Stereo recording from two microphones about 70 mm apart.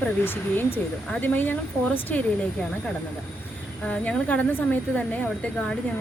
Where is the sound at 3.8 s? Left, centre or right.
Centre.